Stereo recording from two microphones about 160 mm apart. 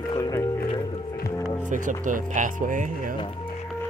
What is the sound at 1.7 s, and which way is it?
Speech, 55° right (ahead or behind).